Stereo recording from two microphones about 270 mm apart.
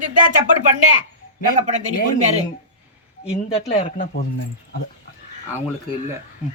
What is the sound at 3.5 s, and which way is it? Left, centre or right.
Speech, left.